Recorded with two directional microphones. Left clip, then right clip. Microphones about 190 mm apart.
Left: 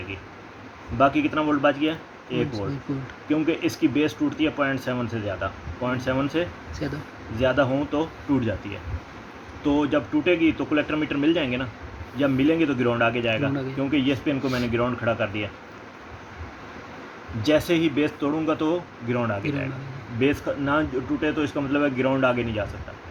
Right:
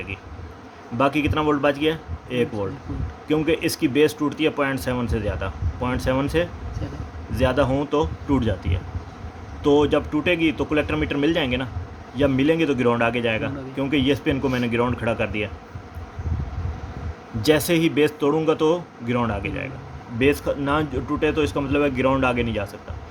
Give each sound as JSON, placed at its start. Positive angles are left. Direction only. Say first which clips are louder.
{"t": 0.9, "sound": "speech", "louder": "even", "side_deg": -55}
{"t": 9.6, "sound": "speech", "louder": "right 5 dB", "side_deg": -55}
{"t": 17.4, "sound": "speech", "louder": "right 2 dB", "side_deg": -60}